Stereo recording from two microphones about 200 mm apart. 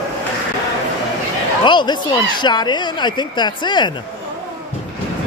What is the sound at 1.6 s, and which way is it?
Speech, 20° left (ahead or behind).